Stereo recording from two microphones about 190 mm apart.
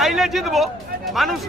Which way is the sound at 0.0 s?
Centre (ahead or behind).